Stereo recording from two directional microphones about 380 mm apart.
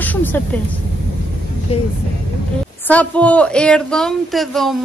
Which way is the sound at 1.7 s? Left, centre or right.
Centre.